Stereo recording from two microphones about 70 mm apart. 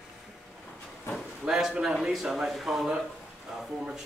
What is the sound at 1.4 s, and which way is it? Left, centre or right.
Speech, centre.